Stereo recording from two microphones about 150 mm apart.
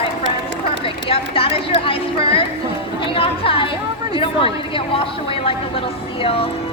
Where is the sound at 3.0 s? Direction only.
35° left (ahead or behind).